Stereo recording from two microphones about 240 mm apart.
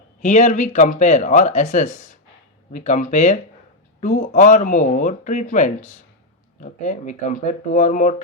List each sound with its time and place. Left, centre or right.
0.2 s speech: left